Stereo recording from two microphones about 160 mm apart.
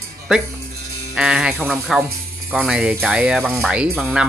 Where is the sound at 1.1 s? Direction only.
5° right (ahead or behind).